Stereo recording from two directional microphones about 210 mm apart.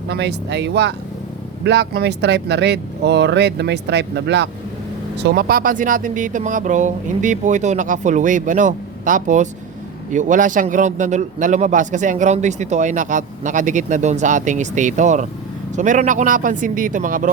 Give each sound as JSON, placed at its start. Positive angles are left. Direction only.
{"t": 0.1, "sound": "speech", "side_deg": -55}